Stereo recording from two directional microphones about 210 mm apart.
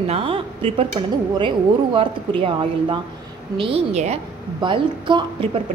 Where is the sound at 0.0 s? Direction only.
25° right (ahead or behind).